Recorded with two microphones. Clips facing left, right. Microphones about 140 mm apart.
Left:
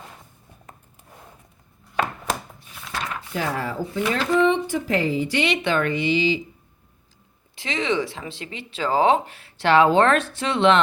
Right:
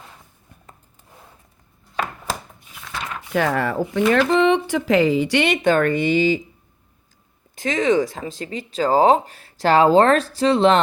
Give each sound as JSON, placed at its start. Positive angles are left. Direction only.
{"t": 3.3, "sound": "speech", "side_deg": -65}
{"t": 5.5, "sound": "speech", "side_deg": -45}
{"t": 7.5, "sound": "speech", "side_deg": -45}